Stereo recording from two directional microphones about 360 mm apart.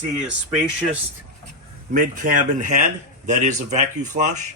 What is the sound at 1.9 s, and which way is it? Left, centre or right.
A man's voice, right.